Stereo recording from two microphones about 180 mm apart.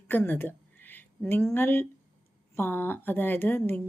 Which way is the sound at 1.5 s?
10° left (ahead or behind).